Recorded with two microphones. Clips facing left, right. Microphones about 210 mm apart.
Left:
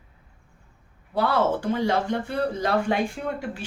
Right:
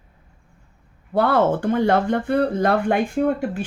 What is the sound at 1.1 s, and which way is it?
Speech, 55° right (ahead or behind).